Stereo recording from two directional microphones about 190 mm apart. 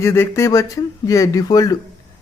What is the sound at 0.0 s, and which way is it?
Speech, 15° left (ahead or behind).